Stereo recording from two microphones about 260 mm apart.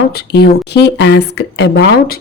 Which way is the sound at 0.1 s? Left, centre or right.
Left.